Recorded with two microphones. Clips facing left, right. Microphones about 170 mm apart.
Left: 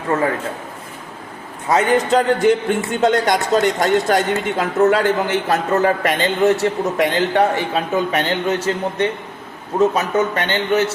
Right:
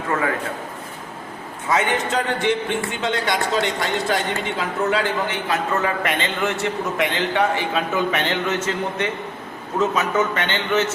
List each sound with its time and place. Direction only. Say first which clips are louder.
1.6 s a man's voice: left 5 dB; 35° left (ahead or behind)